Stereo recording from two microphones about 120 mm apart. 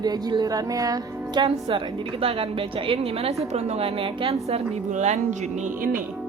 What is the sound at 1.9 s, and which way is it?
A woman's voice, 45° right (ahead or behind).